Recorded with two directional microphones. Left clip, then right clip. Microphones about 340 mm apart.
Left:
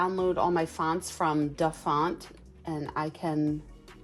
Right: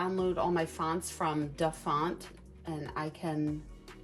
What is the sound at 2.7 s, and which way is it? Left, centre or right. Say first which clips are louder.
Speech: left 5 dB; left.